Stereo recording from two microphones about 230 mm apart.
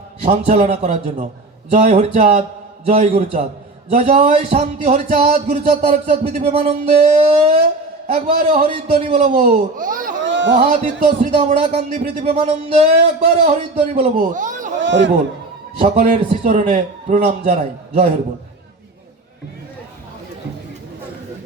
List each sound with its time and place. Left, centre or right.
0.2 s speech: right
9.7 s speech: right
10.2 s a sound: right
10.6 s a man's voice: right
14.8 s a sound: right
15.8 s speech: right